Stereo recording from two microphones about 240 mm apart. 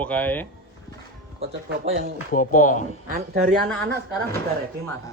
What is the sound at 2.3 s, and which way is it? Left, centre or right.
Speech, left.